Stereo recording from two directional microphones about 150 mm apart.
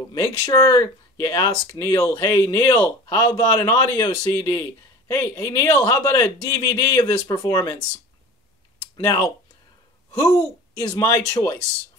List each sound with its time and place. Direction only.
0.1 s a man's voice: 20° left (ahead or behind)
9.0 s a man's voice: 20° left (ahead or behind)